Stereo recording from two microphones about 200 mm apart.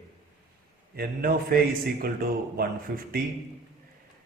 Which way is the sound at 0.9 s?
50° right (ahead or behind).